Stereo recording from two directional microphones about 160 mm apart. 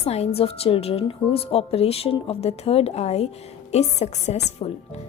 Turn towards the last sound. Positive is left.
turn(degrees=45)  # may be behind; listen again after turning